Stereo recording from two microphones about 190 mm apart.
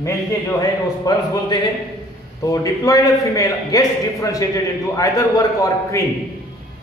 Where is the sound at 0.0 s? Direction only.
15° left (ahead or behind).